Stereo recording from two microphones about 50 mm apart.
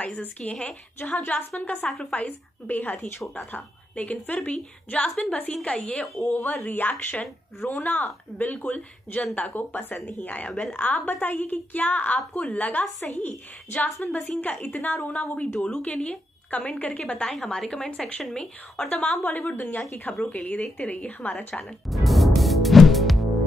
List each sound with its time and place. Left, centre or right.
0.0 s a woman's voice: left
19.5 s a woman's voice: left
20.1 s a woman's voice: left
21.8 s music: centre